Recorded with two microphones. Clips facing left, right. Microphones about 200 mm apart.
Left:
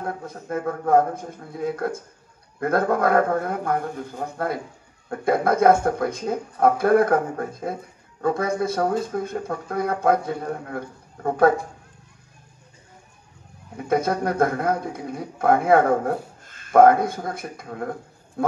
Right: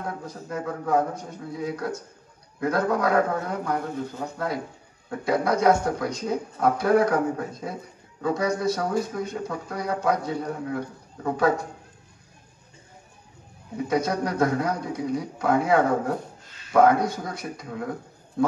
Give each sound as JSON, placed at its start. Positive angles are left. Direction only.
{"t": 0.0, "sound": "speech", "side_deg": 55}
{"t": 13.8, "sound": "speech", "side_deg": 55}